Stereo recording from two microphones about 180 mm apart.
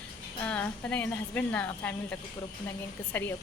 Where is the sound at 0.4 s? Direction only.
5° left (ahead or behind).